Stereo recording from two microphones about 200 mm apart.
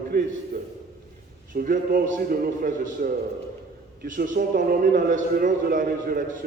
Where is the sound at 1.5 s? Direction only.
45° right (ahead or behind).